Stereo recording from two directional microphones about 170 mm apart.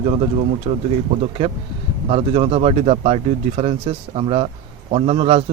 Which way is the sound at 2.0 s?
35° right (ahead or behind).